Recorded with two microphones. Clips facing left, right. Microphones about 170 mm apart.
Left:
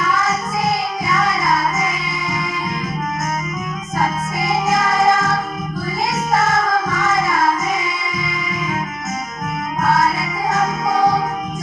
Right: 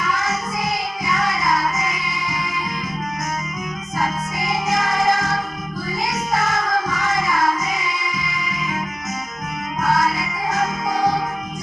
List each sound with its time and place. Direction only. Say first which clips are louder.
0.0 s music: left 4 dB; 50° left (ahead or behind)
4.7 s music: left 3 dB; 50° left (ahead or behind)
9.8 s music: left 3 dB; 50° left (ahead or behind)